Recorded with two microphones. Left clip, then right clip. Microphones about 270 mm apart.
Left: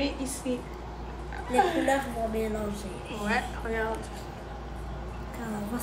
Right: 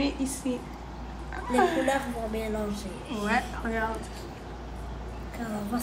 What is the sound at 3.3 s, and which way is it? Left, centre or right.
Speech, centre.